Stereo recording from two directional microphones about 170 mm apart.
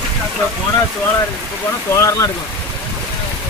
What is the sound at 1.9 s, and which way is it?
Speech, 15° left (ahead or behind).